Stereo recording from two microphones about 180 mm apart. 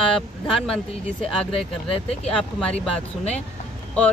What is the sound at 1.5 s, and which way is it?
Speech, 35° left (ahead or behind).